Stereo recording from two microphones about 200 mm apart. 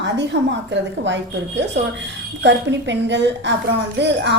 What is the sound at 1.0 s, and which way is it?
A woman's voice, 60° right (ahead or behind).